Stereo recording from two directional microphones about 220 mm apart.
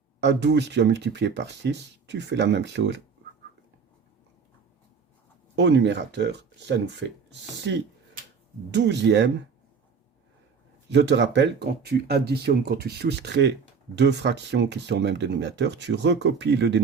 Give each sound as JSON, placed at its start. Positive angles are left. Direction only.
{"t": 0.2, "sound": "speech", "side_deg": -50}
{"t": 5.5, "sound": "speech", "side_deg": -50}
{"t": 7.6, "sound": "a sound", "side_deg": -50}
{"t": 8.7, "sound": "speech", "side_deg": -50}
{"t": 10.8, "sound": "speech", "side_deg": -50}